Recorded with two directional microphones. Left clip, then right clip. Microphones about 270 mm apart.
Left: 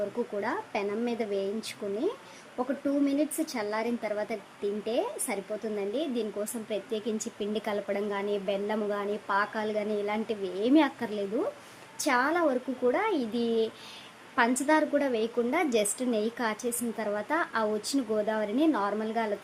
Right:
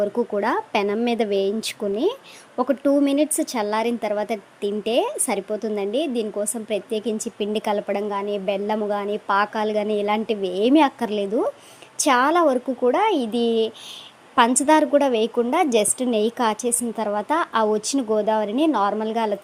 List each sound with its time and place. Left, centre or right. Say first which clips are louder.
0.3 s a woman's voice: right 11 dB; right